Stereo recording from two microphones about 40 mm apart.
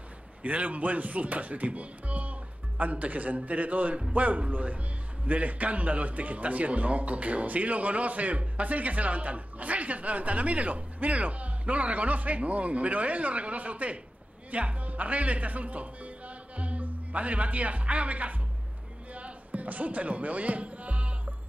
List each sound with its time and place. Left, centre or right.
0.4 s a man's voice: right
19.1 s music: right